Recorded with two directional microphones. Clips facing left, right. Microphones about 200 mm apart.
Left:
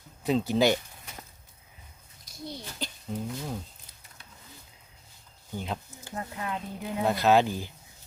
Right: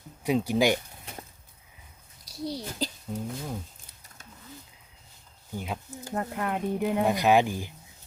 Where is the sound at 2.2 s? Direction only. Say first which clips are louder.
Right 6 dB; 35° right (ahead or behind).